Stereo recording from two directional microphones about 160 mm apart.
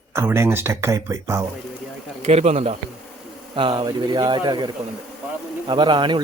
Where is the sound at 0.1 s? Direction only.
15° right (ahead or behind).